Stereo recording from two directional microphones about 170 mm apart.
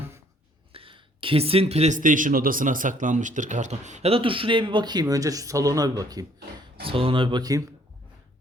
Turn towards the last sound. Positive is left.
turn(degrees=-20)  # may be behind; listen again after turning